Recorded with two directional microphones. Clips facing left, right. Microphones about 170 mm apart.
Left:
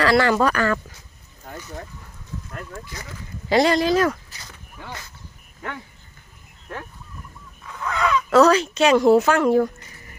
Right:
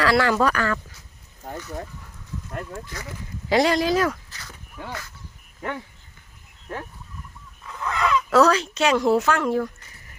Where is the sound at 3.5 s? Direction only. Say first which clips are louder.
Left 2 dB; 10° right (ahead or behind).